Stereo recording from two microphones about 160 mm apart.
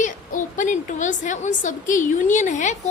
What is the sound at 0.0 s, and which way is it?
A woman's voice, 55° left (ahead or behind).